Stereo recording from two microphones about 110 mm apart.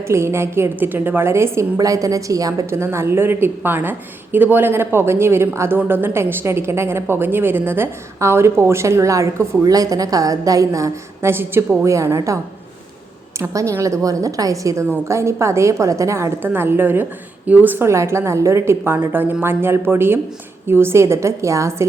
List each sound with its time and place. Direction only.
0.1 s a woman's voice: 25° right (ahead or behind)
13.5 s a woman's voice: 30° right (ahead or behind)